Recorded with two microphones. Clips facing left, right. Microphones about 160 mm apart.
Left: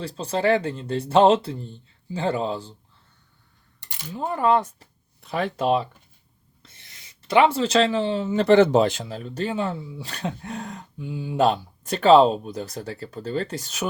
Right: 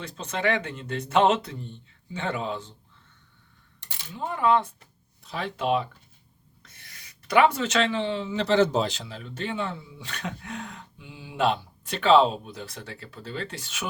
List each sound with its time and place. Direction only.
0.0 s speech: 35° left (ahead or behind)
4.1 s speech: 40° left (ahead or behind)
5.2 s a sound: 55° left (ahead or behind)
5.5 s speech: 35° left (ahead or behind)
6.6 s speech: 25° left (ahead or behind)